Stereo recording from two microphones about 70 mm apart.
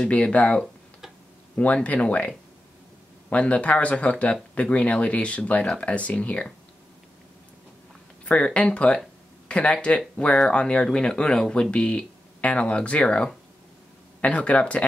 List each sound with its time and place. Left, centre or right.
0.0 s speech: centre
1.6 s speech: left
8.3 s speech: centre